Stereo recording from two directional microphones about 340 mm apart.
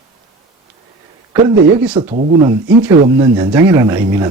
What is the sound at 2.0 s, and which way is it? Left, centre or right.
Speech, centre.